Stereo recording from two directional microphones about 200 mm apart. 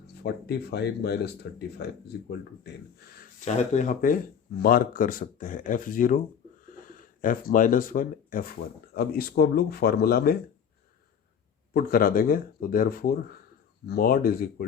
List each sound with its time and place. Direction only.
0.1 s speech: 55° left (ahead or behind)
3.4 s speech: 35° left (ahead or behind)
11.7 s speech: 45° left (ahead or behind)